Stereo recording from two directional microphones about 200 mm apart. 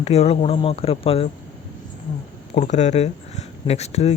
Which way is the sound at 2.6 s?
35° left (ahead or behind).